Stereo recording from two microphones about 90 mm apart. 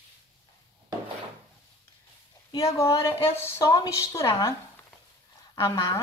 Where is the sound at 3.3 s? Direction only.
30° left (ahead or behind).